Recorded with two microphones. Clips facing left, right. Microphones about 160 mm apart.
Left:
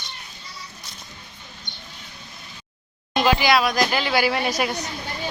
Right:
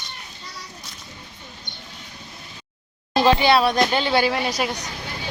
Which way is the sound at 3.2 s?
30° right (ahead or behind).